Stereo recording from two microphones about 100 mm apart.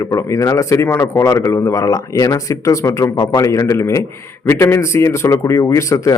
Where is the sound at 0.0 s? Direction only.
30° left (ahead or behind).